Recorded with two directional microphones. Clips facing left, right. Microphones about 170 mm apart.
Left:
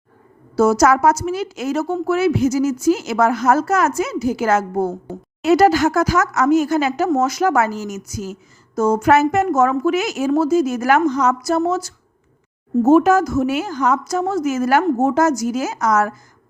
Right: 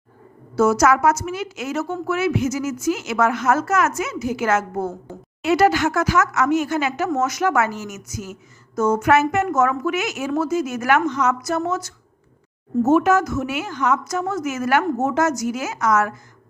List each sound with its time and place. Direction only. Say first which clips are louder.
0.5 s a woman's voice: left 2 dB; 35° left (ahead or behind)